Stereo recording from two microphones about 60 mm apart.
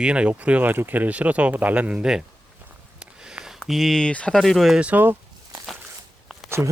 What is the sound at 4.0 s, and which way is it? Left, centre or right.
Speech, centre.